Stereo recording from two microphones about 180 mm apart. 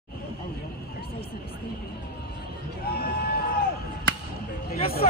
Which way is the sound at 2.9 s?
55° left (ahead or behind).